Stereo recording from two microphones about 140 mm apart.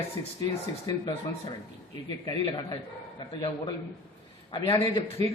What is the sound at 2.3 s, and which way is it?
Speech, 35° left (ahead or behind).